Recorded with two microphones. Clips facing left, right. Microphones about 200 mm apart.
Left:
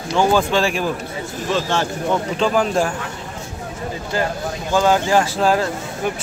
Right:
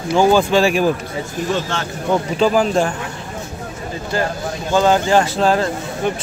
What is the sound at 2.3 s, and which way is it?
Speech, 5° right (ahead or behind).